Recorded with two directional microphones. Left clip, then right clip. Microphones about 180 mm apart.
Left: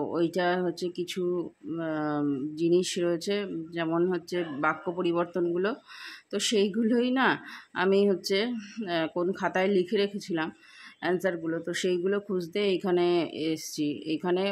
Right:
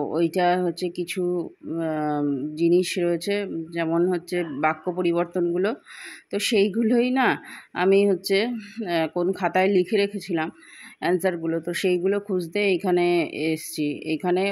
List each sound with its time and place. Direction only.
0.0 s speech: 20° right (ahead or behind)